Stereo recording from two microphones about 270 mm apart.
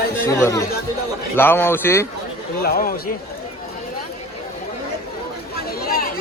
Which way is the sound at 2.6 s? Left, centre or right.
Left.